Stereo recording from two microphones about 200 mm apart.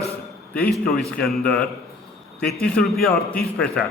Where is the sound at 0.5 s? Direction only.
5° left (ahead or behind).